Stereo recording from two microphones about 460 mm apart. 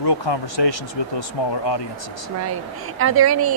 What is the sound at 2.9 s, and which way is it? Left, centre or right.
Speech, right.